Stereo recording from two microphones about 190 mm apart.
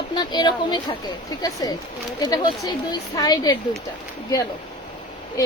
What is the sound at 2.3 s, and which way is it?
A woman's voice, 20° left (ahead or behind).